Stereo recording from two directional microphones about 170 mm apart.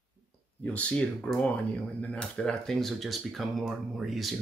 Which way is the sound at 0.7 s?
5° left (ahead or behind).